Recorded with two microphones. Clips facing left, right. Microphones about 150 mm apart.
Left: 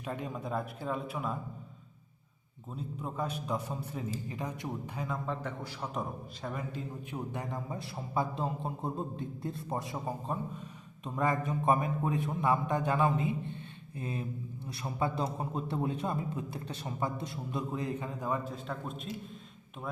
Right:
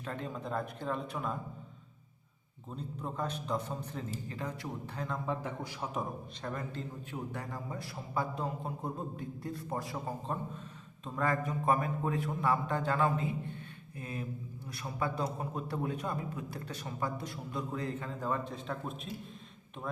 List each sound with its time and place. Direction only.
0.0 s a man's voice: 15° left (ahead or behind)
2.7 s a man's voice: 10° left (ahead or behind)
5.0 s a man's voice: centre (ahead or behind)
6.5 s a man's voice: 10° left (ahead or behind)
18.5 s a man's voice: centre (ahead or behind)